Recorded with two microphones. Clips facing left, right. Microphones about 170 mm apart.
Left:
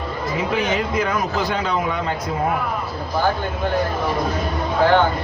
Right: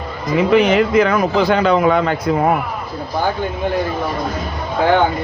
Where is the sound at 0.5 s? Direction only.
70° right (ahead or behind).